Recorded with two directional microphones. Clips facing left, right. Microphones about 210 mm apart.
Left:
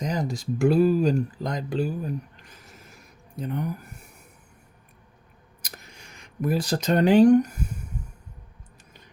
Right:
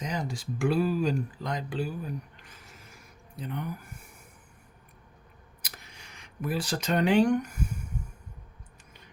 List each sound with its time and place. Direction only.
0.0 s speech: 40° left (ahead or behind)
6.4 s speech: 40° left (ahead or behind)